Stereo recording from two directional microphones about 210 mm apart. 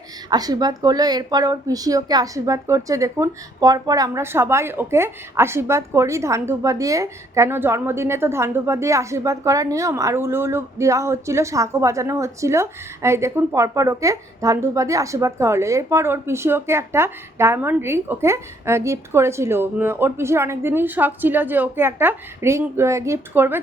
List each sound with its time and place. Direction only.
0.3 s speech: 20° right (ahead or behind)